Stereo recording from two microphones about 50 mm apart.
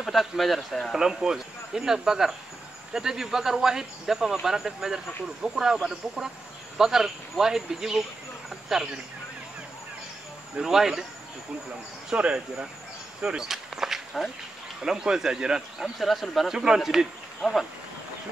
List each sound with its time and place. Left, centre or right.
0.0 s speech: centre
0.9 s speech: centre
8.5 s a sound: centre
10.6 s speech: centre
12.1 s speech: right
13.4 s walk: centre
14.8 s speech: centre
16.0 s speech: centre
16.5 s speech: centre
17.4 s speech: centre